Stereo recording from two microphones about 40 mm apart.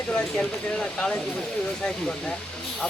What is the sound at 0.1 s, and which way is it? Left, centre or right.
Speech, left.